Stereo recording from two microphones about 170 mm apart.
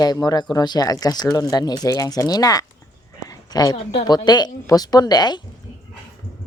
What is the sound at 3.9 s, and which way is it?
Speech, 25° left (ahead or behind).